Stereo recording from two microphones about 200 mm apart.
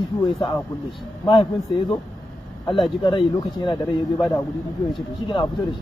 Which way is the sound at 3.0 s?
25° left (ahead or behind).